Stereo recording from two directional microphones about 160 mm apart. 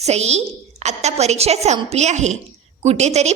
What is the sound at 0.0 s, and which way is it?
A woman's voice, 45° right (ahead or behind).